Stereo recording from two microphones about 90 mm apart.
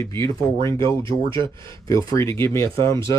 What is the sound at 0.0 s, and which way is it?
Speech, 35° left (ahead or behind).